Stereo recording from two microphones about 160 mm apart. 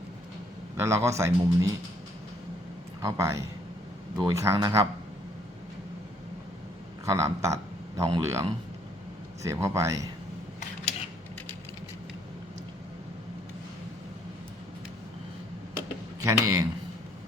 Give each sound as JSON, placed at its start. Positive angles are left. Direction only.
{"t": 0.8, "sound": "speech", "side_deg": -15}
{"t": 3.0, "sound": "speech", "side_deg": -20}
{"t": 7.0, "sound": "a man's voice", "side_deg": -20}
{"t": 16.2, "sound": "speech", "side_deg": -20}